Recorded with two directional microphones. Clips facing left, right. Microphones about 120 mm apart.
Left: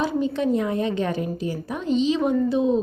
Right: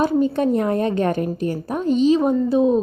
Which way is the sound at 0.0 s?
45° right (ahead or behind).